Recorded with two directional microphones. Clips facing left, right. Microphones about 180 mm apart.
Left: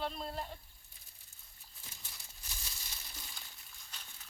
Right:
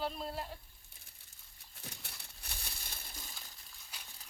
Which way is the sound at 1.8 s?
65° right (ahead or behind).